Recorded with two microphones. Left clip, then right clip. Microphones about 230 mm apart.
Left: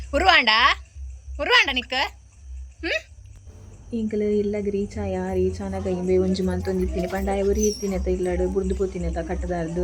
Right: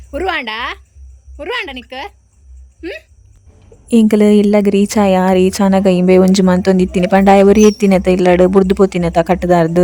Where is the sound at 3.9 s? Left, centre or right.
Right.